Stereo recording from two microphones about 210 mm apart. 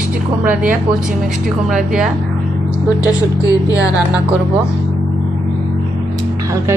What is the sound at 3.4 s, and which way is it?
Speech, 20° left (ahead or behind).